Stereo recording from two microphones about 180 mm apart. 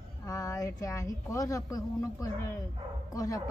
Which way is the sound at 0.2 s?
20° left (ahead or behind).